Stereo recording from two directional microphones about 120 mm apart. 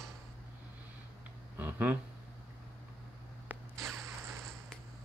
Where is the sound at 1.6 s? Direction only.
15° right (ahead or behind).